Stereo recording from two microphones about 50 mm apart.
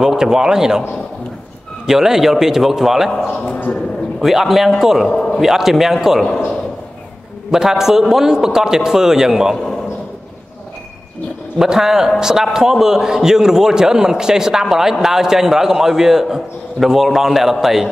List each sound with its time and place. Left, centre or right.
0.0 s a man's voice: centre
1.9 s a man's voice: centre
3.4 s a man's voice: left
4.2 s a man's voice: centre
5.1 s a sound: centre
5.4 s a man's voice: centre
7.5 s a man's voice: centre
11.5 s a man's voice: centre